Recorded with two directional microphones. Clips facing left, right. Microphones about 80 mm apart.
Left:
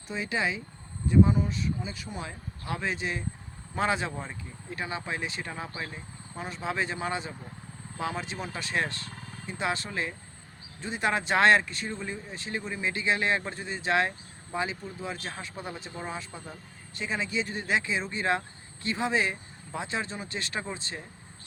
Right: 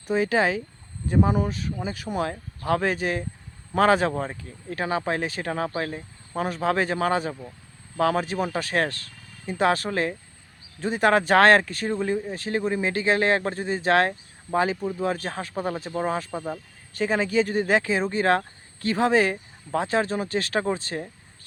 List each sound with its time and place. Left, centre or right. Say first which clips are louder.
0.1 s speech: right 9 dB; right